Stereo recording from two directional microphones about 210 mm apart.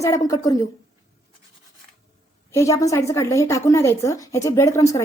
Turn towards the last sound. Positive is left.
turn(degrees=15)  # may be behind; listen again after turning